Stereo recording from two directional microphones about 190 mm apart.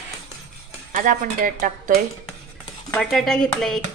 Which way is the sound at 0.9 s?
45° right (ahead or behind).